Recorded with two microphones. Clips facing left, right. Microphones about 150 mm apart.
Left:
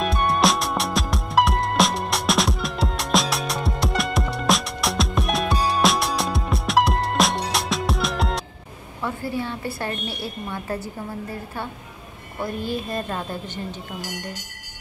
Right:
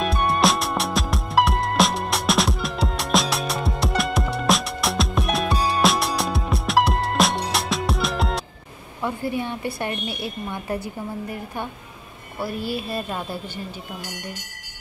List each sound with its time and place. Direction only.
0.0 s music: centre (ahead or behind)
9.0 s a woman's voice: 20° right (ahead or behind)